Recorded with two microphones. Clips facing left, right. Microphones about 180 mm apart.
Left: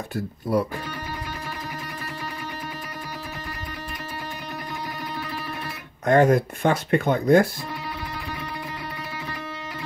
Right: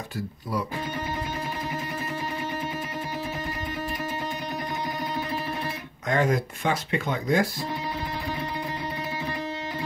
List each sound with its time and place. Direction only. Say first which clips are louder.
0.1 s speech: left 8 dB; 60° left (ahead or behind)
6.0 s speech: left 7 dB; 55° left (ahead or behind)